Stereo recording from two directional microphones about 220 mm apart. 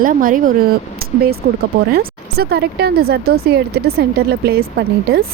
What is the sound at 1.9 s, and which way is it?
A woman's voice, 45° right (ahead or behind).